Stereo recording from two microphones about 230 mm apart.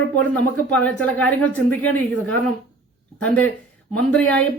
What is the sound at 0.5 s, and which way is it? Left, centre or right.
Speech, centre.